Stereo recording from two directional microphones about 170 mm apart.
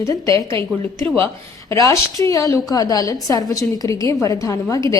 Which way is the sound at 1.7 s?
20° left (ahead or behind).